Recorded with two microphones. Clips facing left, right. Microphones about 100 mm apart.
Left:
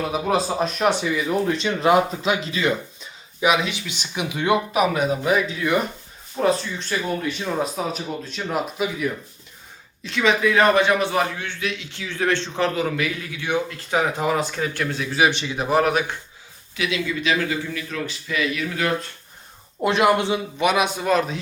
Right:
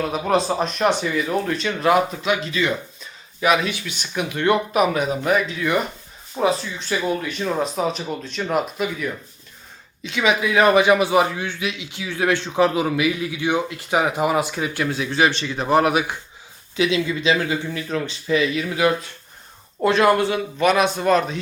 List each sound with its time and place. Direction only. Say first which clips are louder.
0.1 s speech: right 2 dB; 5° left (ahead or behind); by 2.7 s 25° left (ahead or behind)
3.4 s a man's voice: right 1 dB; 15° left (ahead or behind); by 15.0 s 5° right (ahead or behind)
15.1 s speech: left 1 dB; 10° left (ahead or behind)
15.7 s speech: right 2 dB; 5° right (ahead or behind)
16.7 s speech: right 4 dB; 25° right (ahead or behind)
19.8 s speech: right 2 dB; 15° left (ahead or behind)